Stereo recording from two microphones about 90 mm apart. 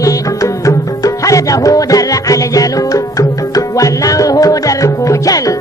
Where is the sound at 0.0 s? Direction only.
40° left (ahead or behind).